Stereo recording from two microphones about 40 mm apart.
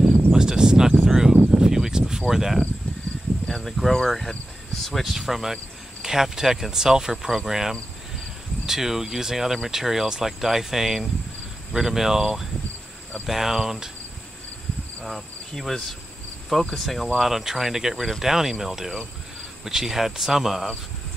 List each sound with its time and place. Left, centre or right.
0.3 s a sound: centre
3.4 s speech: centre
15.0 s insect: centre
16.4 s cricket: centre
17.2 s speech: centre